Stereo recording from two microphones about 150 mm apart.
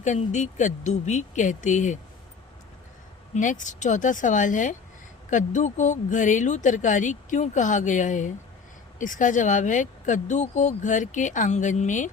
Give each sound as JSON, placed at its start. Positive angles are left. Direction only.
{"t": 0.0, "sound": "speech", "side_deg": 55}
{"t": 3.3, "sound": "speech", "side_deg": 55}